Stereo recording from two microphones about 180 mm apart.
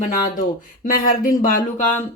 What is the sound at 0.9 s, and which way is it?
Speech, 55° left (ahead or behind).